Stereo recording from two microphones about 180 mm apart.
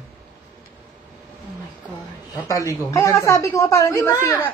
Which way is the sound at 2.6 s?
15° left (ahead or behind).